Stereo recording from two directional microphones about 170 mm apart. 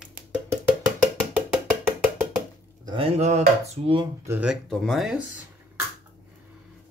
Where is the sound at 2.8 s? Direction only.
30° right (ahead or behind).